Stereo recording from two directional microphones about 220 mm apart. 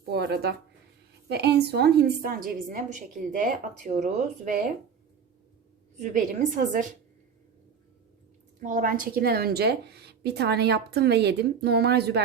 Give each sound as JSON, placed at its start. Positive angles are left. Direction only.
{"t": 0.0, "sound": "a woman's voice", "side_deg": -45}
{"t": 6.0, "sound": "a woman's voice", "side_deg": -35}
{"t": 8.6, "sound": "a woman's voice", "side_deg": -40}